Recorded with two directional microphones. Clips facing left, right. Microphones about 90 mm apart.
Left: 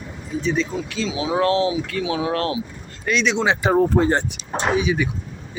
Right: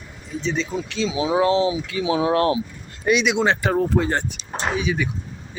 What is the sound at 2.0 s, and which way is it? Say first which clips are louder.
Speech: right 6 dB; 25° right (ahead or behind).